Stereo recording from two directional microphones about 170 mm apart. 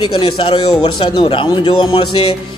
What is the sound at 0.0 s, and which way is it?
A man's voice, 30° left (ahead or behind).